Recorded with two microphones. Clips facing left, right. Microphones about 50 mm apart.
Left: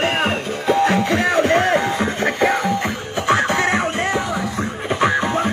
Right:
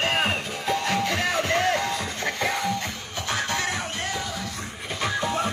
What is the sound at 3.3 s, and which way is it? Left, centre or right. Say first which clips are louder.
Music: left 10 dB; left.